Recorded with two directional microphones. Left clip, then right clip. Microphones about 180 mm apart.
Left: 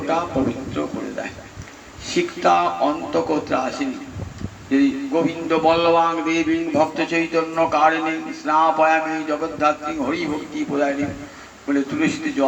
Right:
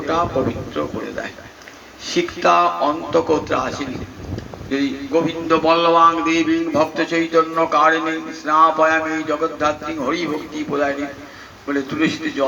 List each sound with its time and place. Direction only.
2.0 s a man's voice: 40° right (ahead or behind)